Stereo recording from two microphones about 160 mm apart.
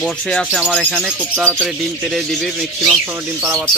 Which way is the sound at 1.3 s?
15° right (ahead or behind).